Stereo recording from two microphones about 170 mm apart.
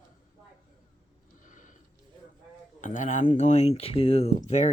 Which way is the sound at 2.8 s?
45° left (ahead or behind).